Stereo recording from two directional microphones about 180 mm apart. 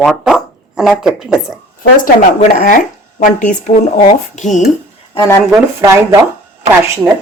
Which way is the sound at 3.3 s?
45° left (ahead or behind).